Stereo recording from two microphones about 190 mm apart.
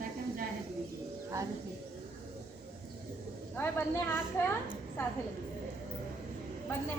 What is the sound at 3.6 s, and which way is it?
Speech, 10° left (ahead or behind).